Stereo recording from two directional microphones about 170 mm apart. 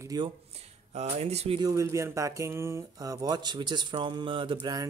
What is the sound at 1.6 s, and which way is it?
Speech, 20° right (ahead or behind).